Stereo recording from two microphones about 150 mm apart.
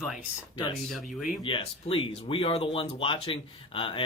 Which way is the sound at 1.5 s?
35° left (ahead or behind).